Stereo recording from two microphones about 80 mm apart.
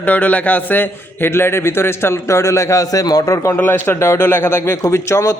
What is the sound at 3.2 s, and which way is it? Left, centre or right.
Speech, left.